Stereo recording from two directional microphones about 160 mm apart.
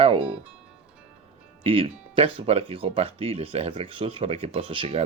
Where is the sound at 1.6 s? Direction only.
35° right (ahead or behind).